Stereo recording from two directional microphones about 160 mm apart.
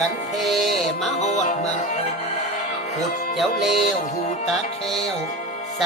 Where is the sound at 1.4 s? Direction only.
50° left (ahead or behind).